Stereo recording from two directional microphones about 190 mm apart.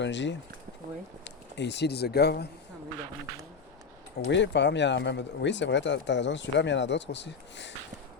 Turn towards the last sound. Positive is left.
turn(degrees=65)  # may be behind; listen again after turning